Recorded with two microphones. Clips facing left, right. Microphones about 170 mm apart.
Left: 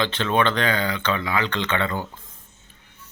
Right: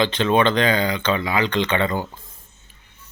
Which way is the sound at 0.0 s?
15° right (ahead or behind).